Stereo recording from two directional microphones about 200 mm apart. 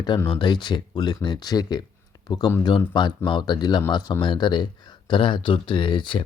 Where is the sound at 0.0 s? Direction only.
20° left (ahead or behind).